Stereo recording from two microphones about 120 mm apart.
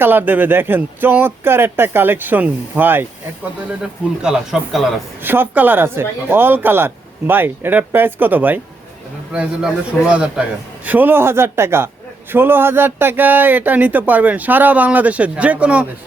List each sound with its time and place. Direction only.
0.0 s speech: 15° right (ahead or behind)
4.2 s speech: 5° right (ahead or behind)
5.2 s a man's voice: 15° right (ahead or behind)